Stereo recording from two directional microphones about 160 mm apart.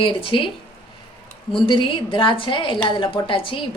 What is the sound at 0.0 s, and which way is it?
Speech, 35° left (ahead or behind).